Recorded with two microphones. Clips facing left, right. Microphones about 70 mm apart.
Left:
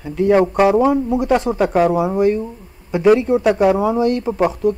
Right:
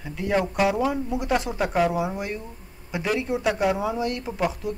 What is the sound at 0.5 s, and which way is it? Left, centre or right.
Speech, left.